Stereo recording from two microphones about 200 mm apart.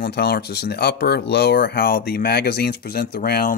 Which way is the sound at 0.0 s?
55° left (ahead or behind).